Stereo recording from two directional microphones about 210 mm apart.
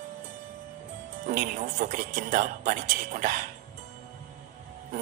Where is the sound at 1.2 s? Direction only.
35° right (ahead or behind).